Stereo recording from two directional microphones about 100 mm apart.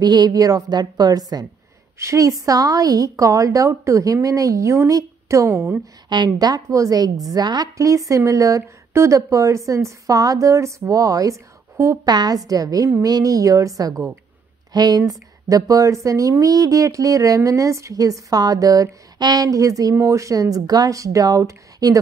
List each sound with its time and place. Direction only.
0.0 s speech: 45° right (ahead or behind); by 5.8 s 25° right (ahead or behind)
6.0 s a woman's voice: 45° right (ahead or behind); by 12.1 s 30° right (ahead or behind)
12.1 s a woman's voice: 45° right (ahead or behind)